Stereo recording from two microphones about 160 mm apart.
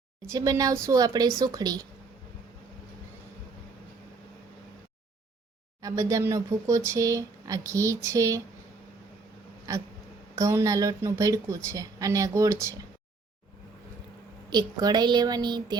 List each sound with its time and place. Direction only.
0.3 s speech: 20° right (ahead or behind)
5.8 s speech: 20° right (ahead or behind)
9.7 s speech: 20° right (ahead or behind)
14.5 s speech: 25° right (ahead or behind)